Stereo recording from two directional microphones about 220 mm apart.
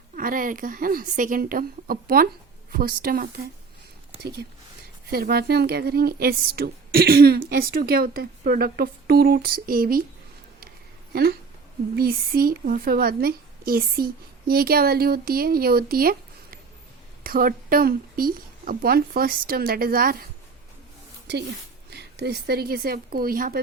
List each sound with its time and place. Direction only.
0.2 s speech: 40° right (ahead or behind)
11.1 s speech: 45° right (ahead or behind)
21.8 s speech: 50° right (ahead or behind)